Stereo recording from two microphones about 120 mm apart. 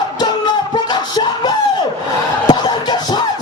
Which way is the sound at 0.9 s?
35° left (ahead or behind).